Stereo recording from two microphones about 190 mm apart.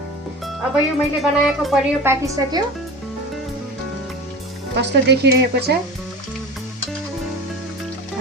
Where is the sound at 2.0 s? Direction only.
20° right (ahead or behind).